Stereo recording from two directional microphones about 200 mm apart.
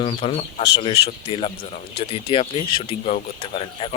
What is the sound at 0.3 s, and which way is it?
Speech, 55° left (ahead or behind).